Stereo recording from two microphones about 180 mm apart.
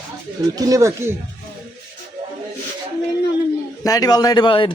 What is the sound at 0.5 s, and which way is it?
Speech, 20° right (ahead or behind).